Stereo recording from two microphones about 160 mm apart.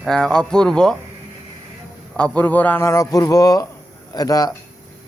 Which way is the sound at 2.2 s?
10° left (ahead or behind).